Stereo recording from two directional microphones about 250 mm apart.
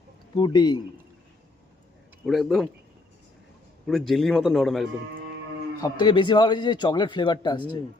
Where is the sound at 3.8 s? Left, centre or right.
Centre.